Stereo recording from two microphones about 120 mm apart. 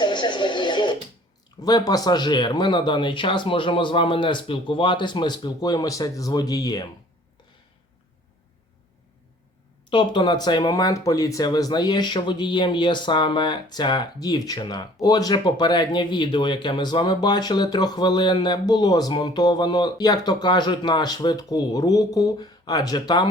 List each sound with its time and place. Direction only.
0.0 s a sound: 40° left (ahead or behind)
1.6 s speech: 35° left (ahead or behind)
9.9 s speech: 40° left (ahead or behind)